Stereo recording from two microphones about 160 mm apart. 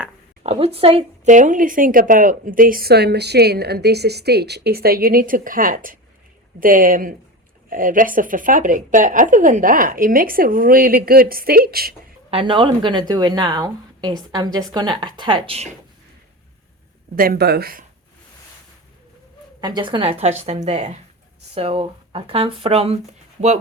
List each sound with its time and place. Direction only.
0.4 s speech: 40° right (ahead or behind); by 11.9 s 70° right (ahead or behind)
12.3 s a woman's voice: 35° right (ahead or behind)
17.2 s speech: 80° right
19.6 s a woman's voice: 30° right (ahead or behind)